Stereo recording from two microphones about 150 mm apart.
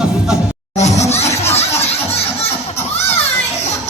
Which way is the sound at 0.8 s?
50° left (ahead or behind).